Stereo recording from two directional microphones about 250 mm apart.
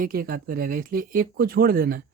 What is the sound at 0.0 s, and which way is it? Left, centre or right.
Speech, right.